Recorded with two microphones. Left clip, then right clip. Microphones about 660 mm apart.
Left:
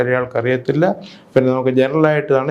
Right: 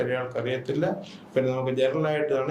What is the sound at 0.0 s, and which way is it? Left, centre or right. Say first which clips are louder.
Speech: left 10 dB; left.